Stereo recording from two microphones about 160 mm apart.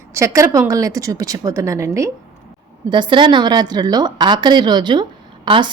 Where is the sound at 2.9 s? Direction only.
30° right (ahead or behind).